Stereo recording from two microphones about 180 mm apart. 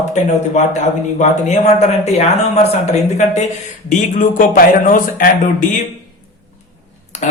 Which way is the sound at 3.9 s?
45° left (ahead or behind).